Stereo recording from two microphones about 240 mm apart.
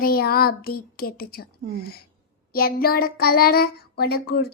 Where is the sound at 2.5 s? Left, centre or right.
Left.